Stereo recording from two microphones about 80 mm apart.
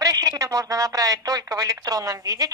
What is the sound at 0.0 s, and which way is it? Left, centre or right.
Speech, right.